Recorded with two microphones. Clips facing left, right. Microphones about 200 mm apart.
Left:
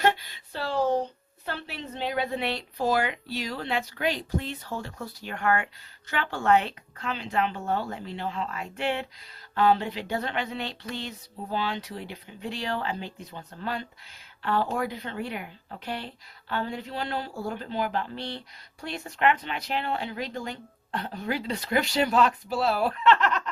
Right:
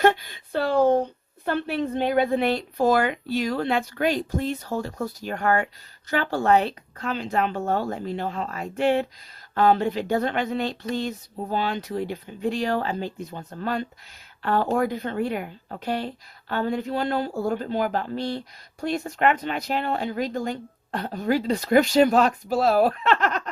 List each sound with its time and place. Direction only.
0.0 s speech: 50° right (ahead or behind)